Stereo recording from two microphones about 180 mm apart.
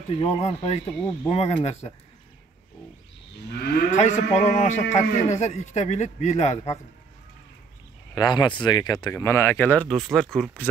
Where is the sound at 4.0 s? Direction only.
40° left (ahead or behind).